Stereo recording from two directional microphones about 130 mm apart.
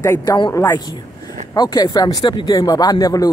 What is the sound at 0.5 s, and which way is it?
Speech, 25° left (ahead or behind).